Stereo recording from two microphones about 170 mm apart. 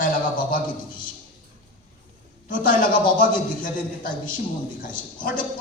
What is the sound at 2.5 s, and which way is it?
A man's voice, 55° left (ahead or behind).